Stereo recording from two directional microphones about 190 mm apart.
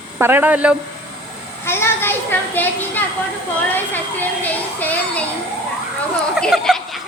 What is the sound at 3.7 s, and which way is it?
Speech, 10° left (ahead or behind).